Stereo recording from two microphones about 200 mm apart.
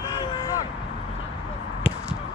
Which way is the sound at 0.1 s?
20° left (ahead or behind).